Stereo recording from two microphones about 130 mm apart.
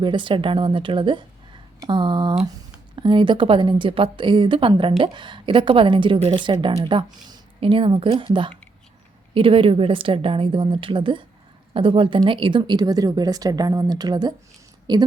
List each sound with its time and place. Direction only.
0.0 s a woman's voice: 40° right (ahead or behind)